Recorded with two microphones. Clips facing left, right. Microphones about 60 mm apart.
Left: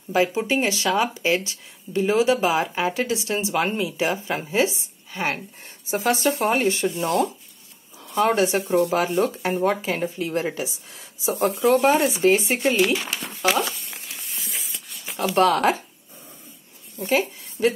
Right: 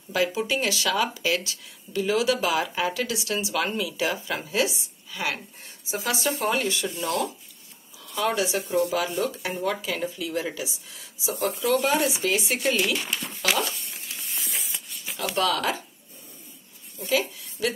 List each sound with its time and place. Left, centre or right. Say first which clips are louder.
0.1 s speech: left 4 dB; left
14.3 s a sound: right 1 dB; centre
15.3 s speech: left 7 dB; left
17.0 s a woman's voice: left 3 dB; left